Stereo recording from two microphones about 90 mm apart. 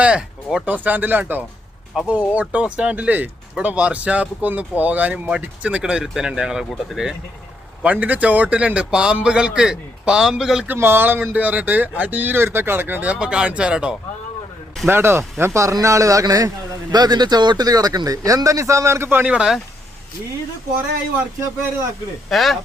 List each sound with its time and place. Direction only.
0.0 s speech: 10° right (ahead or behind)
7.8 s speech: 15° right (ahead or behind)
10.7 s speech: 25° right (ahead or behind)
14.8 s a man's voice: 25° right (ahead or behind)
19.3 s speech: 10° right (ahead or behind)
22.3 s speech: centre (ahead or behind)